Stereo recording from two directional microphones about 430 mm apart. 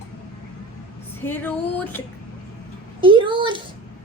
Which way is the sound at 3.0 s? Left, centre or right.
Centre.